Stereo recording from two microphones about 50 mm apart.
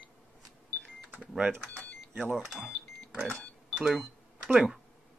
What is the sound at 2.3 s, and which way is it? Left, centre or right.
Speech, centre.